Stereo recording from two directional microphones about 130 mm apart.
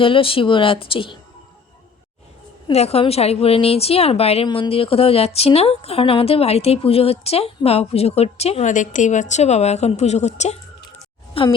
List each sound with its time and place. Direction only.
0.0 s speech: 45° left (ahead or behind)
2.7 s speech: 50° left (ahead or behind)
4.4 s speech: 40° left (ahead or behind)
8.6 s a woman's voice: 75° left (ahead or behind)
11.4 s speech: 45° left (ahead or behind)